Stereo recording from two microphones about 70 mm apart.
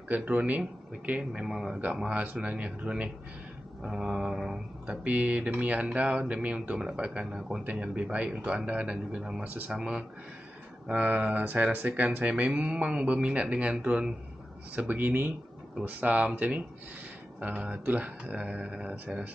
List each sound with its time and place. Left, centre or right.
0.1 s speech: right
1.4 s a man's voice: centre
2.0 s speech: centre
3.8 s a man's voice: centre
5.0 s a man's voice: right
7.6 s a man's voice: right
9.4 s speech: right
9.7 s a man's voice: centre
10.9 s a man's voice: right